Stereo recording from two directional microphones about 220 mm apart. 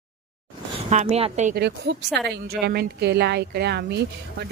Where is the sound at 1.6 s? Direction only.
50° right (ahead or behind).